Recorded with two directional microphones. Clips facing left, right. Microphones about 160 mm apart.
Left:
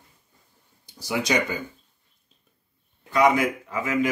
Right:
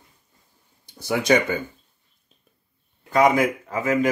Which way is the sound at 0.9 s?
55° right (ahead or behind).